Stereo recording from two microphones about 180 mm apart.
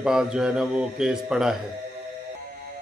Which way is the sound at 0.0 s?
5° right (ahead or behind).